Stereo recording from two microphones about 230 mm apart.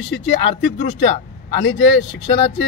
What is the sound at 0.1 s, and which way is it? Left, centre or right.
Speech, left.